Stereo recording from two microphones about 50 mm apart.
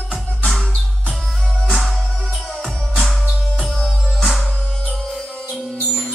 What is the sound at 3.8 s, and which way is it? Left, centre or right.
Music, centre.